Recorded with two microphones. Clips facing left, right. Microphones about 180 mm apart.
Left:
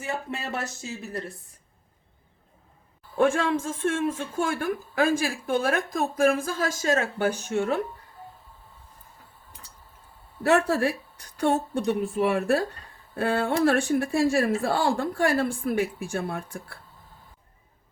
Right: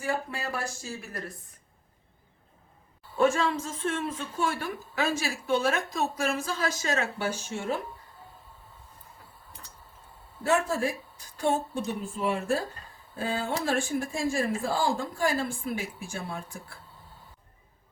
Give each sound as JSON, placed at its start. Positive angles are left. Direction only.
{"t": 0.0, "sound": "speech", "side_deg": 25}
{"t": 3.2, "sound": "a woman's voice", "side_deg": 55}
{"t": 10.4, "sound": "a woman's voice", "side_deg": 65}